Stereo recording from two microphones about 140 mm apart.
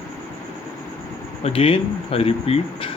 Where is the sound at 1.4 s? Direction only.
40° left (ahead or behind).